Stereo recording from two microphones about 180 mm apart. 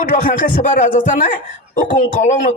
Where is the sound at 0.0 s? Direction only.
50° left (ahead or behind).